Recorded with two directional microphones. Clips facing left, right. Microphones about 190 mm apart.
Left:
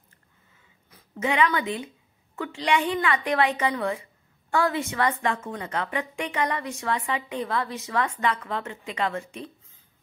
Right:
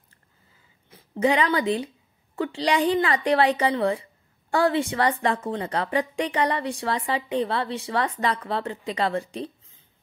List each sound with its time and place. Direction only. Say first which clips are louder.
0.8 s a woman's voice: right 6 dB; 30° right (ahead or behind)